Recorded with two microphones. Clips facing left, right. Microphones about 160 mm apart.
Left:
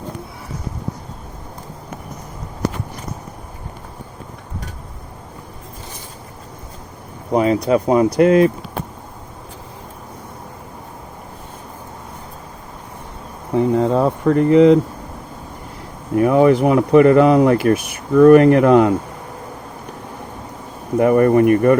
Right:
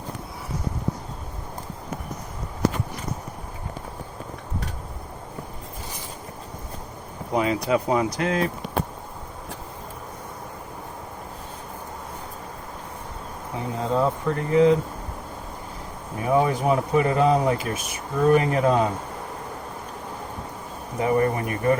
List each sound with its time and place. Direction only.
7.3 s speech: 40° left (ahead or behind)
8.1 s speech: 60° left (ahead or behind)
13.5 s speech: 65° left (ahead or behind)
16.1 s speech: 70° left (ahead or behind)
21.0 s speech: 60° left (ahead or behind)